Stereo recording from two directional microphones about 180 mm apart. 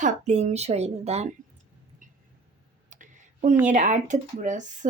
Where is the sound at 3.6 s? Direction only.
40° right (ahead or behind).